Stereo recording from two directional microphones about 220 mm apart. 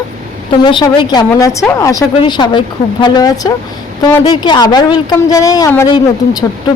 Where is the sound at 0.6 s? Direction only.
20° left (ahead or behind).